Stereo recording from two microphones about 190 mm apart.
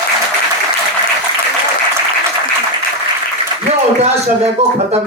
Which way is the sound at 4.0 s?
35° right (ahead or behind).